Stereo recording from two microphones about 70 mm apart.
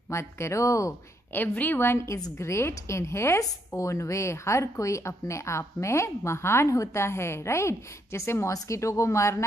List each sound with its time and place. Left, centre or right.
0.1 s a woman's voice: left
1.3 s a woman's voice: left